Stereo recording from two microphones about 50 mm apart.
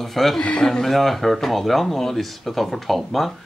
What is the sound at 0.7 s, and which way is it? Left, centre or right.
Speech, centre.